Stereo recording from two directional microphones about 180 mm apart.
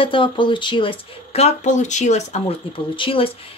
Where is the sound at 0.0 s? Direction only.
30° left (ahead or behind).